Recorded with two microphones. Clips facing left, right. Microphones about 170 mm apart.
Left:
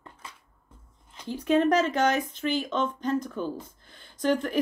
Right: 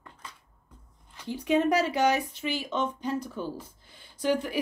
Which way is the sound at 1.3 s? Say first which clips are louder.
Left 2 dB; 15° right (ahead or behind).